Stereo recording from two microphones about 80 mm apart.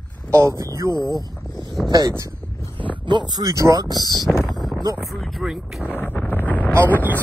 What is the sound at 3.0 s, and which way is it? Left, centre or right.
Speech, right.